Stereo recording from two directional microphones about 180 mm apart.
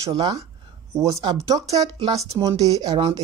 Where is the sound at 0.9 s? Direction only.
15° right (ahead or behind).